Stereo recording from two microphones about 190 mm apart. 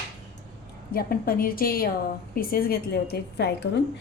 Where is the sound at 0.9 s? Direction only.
50° left (ahead or behind).